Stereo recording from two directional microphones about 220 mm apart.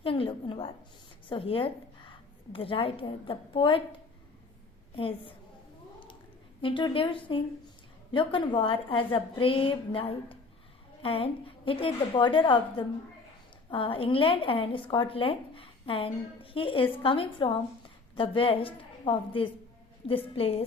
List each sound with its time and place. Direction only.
0.0 s a woman's voice: 25° left (ahead or behind)
4.9 s a woman's voice: 25° left (ahead or behind)
6.6 s a woman's voice: 25° left (ahead or behind)